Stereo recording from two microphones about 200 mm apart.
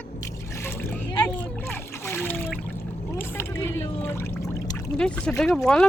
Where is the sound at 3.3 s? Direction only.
10° left (ahead or behind).